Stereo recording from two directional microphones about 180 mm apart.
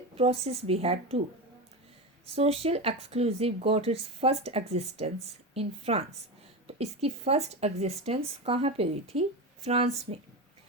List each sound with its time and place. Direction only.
0.2 s speech: 35° right (ahead or behind)
2.3 s speech: 35° right (ahead or behind)